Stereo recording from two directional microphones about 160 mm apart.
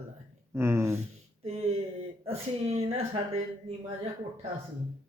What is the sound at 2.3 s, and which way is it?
Speech, 40° right (ahead or behind).